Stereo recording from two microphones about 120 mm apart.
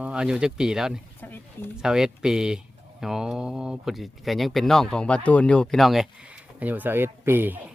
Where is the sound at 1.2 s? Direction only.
15° left (ahead or behind).